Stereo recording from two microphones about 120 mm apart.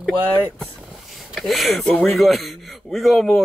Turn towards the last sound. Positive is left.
turn(degrees=0)  # may be behind; listen again after turning